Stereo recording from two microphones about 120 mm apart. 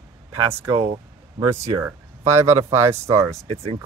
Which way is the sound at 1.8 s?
20° right (ahead or behind).